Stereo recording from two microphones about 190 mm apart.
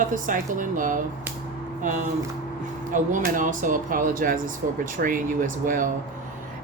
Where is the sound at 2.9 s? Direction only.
45° right (ahead or behind).